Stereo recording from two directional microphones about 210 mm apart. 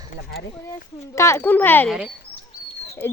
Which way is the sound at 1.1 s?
15° left (ahead or behind).